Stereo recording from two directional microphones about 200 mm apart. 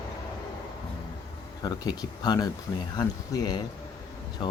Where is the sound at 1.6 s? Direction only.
20° left (ahead or behind).